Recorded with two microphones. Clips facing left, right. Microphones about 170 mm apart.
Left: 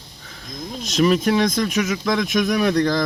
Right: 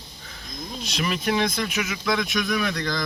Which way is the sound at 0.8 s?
45° left (ahead or behind).